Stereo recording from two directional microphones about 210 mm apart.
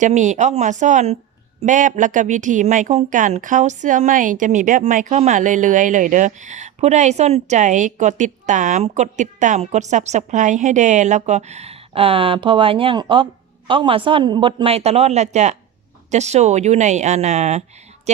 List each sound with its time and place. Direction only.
0.0 s a woman's voice: 35° right (ahead or behind)